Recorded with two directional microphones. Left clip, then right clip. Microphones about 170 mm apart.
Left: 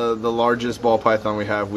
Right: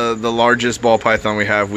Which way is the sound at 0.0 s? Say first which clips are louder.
Right 4 dB; 55° right (ahead or behind).